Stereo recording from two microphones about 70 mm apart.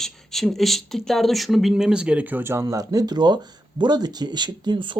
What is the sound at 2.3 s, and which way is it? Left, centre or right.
Speech, right.